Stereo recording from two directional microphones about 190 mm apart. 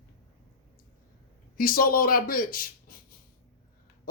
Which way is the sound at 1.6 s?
50° left (ahead or behind).